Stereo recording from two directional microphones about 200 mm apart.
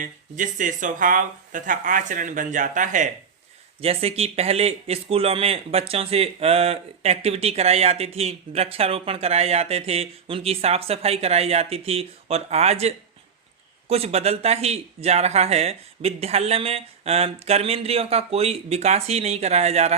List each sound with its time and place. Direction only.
0.0 s speech: 40° right (ahead or behind)